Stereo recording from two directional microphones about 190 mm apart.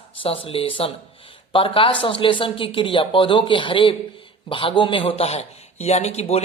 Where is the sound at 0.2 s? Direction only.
30° left (ahead or behind).